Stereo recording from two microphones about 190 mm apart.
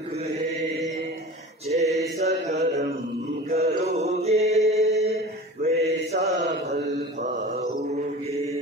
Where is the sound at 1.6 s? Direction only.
35° right (ahead or behind).